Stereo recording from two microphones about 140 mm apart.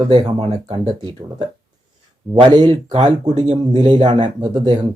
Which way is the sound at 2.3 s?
30° right (ahead or behind).